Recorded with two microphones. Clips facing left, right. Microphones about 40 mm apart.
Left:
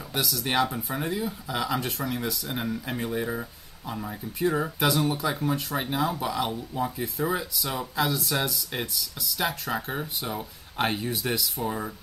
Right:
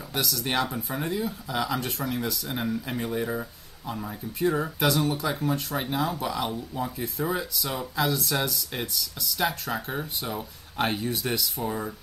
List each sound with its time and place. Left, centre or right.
0.1 s speech: centre